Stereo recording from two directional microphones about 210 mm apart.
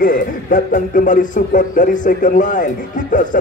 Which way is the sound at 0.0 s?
40° left (ahead or behind).